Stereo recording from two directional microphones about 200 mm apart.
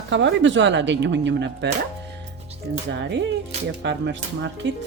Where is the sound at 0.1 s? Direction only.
65° right (ahead or behind).